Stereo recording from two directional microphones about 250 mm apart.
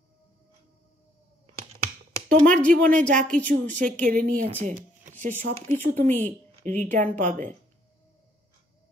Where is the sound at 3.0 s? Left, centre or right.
Right.